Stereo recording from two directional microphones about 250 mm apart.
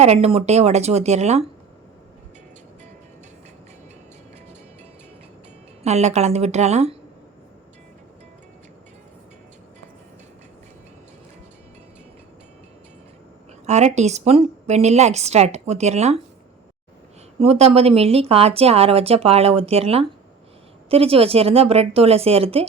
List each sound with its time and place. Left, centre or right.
0.0 s a woman's voice: right
5.8 s a woman's voice: right
13.7 s a woman's voice: right
17.4 s a woman's voice: right